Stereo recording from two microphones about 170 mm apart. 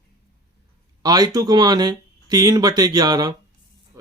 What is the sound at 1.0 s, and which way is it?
Speech, 20° right (ahead or behind).